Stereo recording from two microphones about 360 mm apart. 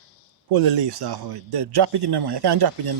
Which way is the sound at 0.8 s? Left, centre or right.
Right.